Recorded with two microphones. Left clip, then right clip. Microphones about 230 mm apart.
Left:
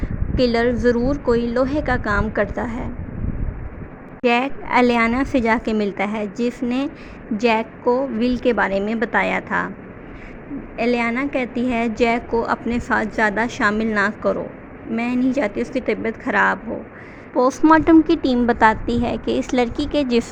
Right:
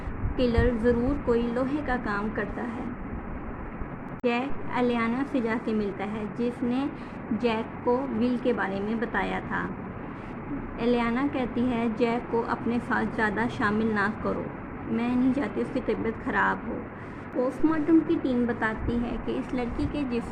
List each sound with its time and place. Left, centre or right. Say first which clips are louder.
0.3 s a woman's voice: left 8 dB; left
4.2 s a woman's voice: left 10 dB; left
10.8 s a woman's voice: left 6 dB; left
17.3 s a woman's voice: left 12 dB; left